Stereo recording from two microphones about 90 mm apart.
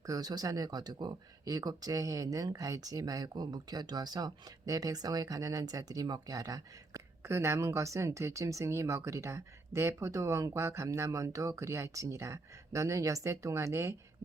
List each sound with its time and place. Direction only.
0.0 s speech: 45° right (ahead or behind)